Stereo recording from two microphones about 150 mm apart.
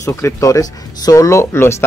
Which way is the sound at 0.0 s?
20° left (ahead or behind).